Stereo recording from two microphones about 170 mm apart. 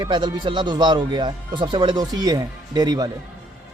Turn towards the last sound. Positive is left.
turn(degrees=-25)  # may be behind; listen again after turning